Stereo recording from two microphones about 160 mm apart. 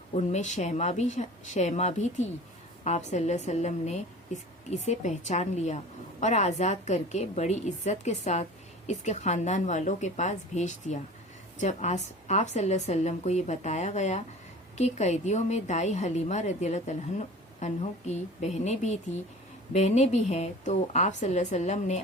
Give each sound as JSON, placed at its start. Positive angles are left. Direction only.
{"t": 0.2, "sound": "a woman's voice", "side_deg": 45}